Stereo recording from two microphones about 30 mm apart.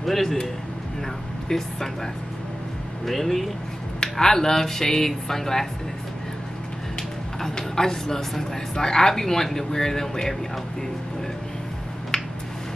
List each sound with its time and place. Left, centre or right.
0.0 s a man's voice: centre
1.5 s speech: centre
3.1 s speech: centre
4.0 s speech: centre
7.0 s speech: centre